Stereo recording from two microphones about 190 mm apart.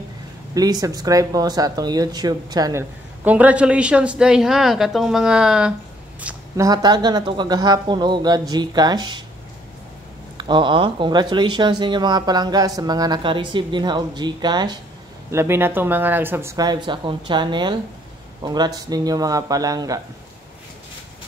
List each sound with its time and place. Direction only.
0.6 s speech: 20° right (ahead or behind)
3.3 s a woman's voice: 5° right (ahead or behind)
6.2 s speech: 15° right (ahead or behind)
10.3 s speech: 25° right (ahead or behind)